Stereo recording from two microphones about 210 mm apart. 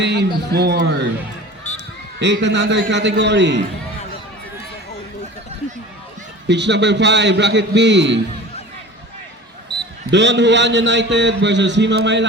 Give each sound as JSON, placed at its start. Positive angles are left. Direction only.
{"t": 0.0, "sound": "a man's voice", "side_deg": -55}
{"t": 2.1, "sound": "a man's voice", "side_deg": -55}
{"t": 6.5, "sound": "a man's voice", "side_deg": -55}
{"t": 10.1, "sound": "a man's voice", "side_deg": -55}